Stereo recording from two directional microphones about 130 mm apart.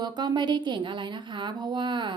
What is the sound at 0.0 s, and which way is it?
Speech, 35° right (ahead or behind).